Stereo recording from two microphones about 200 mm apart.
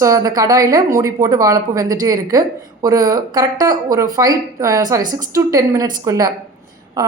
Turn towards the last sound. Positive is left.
turn(degrees=-20)  # may be behind; listen again after turning